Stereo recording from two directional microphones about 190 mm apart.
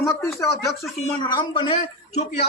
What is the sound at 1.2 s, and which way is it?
A man's voice, 25° left (ahead or behind).